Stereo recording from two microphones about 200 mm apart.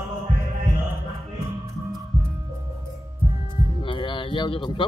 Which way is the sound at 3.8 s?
25° left (ahead or behind).